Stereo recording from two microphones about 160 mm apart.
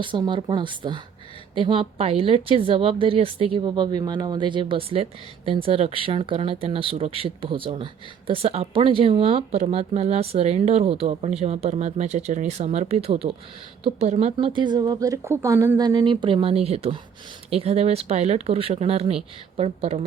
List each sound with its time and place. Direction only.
0.0 s speech: 30° right (ahead or behind)
14.3 s speech: 30° right (ahead or behind)